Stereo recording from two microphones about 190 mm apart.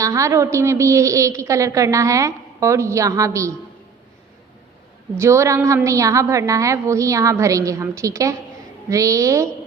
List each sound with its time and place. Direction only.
0.0 s a woman's voice: 15° right (ahead or behind)
5.1 s a woman's voice: 15° right (ahead or behind)